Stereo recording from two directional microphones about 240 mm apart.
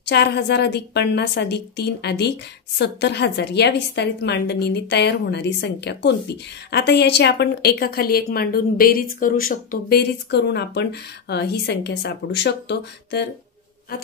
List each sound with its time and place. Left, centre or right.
0.0 s speech: left